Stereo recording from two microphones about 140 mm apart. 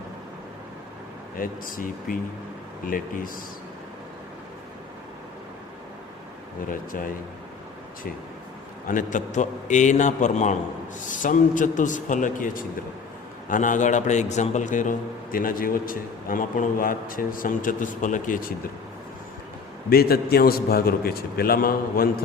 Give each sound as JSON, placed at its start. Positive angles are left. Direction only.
{"t": 1.4, "sound": "speech", "side_deg": 80}
{"t": 6.7, "sound": "a man's voice", "side_deg": 75}
{"t": 8.9, "sound": "a man's voice", "side_deg": 70}
{"t": 19.9, "sound": "a man's voice", "side_deg": 90}